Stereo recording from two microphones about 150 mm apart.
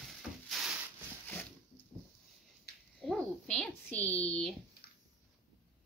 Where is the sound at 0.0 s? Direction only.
Centre (ahead or behind).